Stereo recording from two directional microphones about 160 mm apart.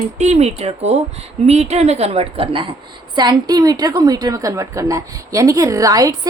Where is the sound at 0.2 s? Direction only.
45° right (ahead or behind).